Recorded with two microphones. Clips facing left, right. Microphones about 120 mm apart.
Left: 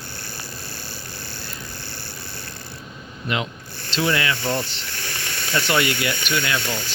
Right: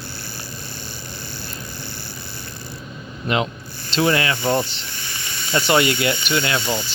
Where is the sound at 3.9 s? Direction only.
30° right (ahead or behind).